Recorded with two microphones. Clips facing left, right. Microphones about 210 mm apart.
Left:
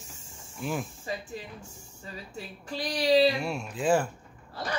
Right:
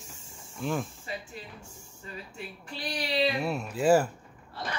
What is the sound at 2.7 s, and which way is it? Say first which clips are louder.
Speech: left 7 dB; 40° left (ahead or behind).